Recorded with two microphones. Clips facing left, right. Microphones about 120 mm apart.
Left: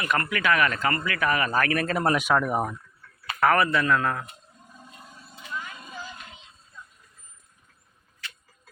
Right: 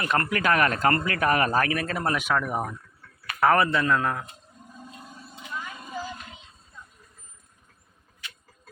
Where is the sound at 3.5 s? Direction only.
25° right (ahead or behind).